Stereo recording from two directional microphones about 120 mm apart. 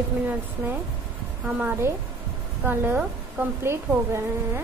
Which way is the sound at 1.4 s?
15° right (ahead or behind).